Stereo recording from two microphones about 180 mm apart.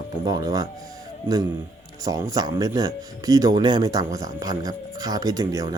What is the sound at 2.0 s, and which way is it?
Speech, 20° right (ahead or behind).